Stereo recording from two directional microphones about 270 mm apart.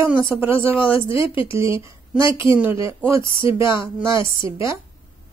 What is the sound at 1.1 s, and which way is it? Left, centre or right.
Speech, centre.